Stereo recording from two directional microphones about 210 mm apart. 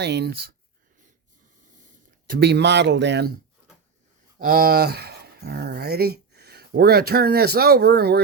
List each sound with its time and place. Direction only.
0.0 s speech: 50° right (ahead or behind)
2.2 s speech: 50° right (ahead or behind)
4.4 s speech: 45° right (ahead or behind)